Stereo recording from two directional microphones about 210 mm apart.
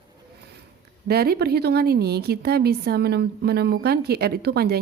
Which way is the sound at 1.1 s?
50° right (ahead or behind).